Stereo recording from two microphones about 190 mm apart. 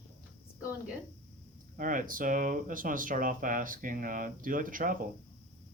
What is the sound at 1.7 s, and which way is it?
Speech, 45° right (ahead or behind).